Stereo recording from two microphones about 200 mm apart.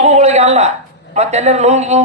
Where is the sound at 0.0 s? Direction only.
35° right (ahead or behind).